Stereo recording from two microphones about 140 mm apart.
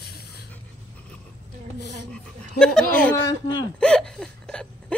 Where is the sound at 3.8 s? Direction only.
5° left (ahead or behind).